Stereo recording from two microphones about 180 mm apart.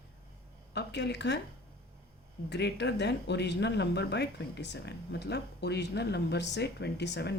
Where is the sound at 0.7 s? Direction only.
75° left (ahead or behind).